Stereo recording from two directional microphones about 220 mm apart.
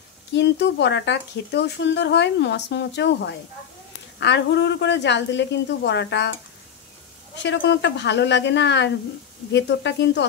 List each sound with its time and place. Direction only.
0.3 s speech: 50° left (ahead or behind)
7.4 s speech: 55° left (ahead or behind)